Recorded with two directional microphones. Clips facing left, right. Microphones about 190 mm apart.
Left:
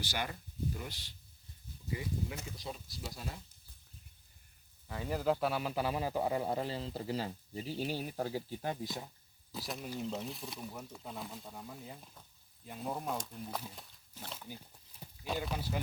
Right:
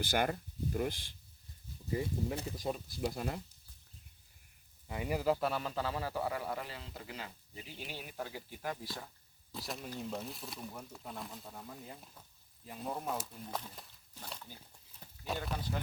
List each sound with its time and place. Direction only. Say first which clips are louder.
0.0 s speech: right 7 dB; 50° right (ahead or behind)
1.9 s speech: right 4 dB; 35° right (ahead or behind)
2.6 s speech: right 8 dB; 50° right (ahead or behind)
4.9 s a man's voice: even; 10° right (ahead or behind); by 9.0 s 20° left (ahead or behind)
9.5 s speech: left 2 dB; centre (ahead or behind)
15.3 s speech: left 1 dB; centre (ahead or behind)